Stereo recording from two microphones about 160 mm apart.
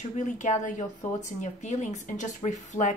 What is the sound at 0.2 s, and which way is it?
A woman's voice, 50° left (ahead or behind).